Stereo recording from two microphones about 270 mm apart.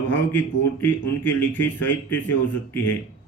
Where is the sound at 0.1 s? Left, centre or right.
Centre.